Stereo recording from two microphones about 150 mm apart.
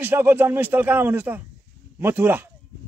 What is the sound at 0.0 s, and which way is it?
A man's voice, 15° right (ahead or behind).